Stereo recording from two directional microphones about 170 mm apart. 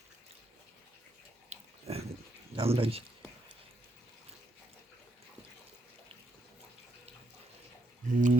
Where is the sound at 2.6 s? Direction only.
35° right (ahead or behind).